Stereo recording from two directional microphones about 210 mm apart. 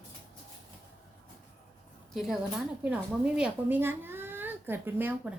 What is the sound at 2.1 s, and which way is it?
A woman's voice, centre (ahead or behind).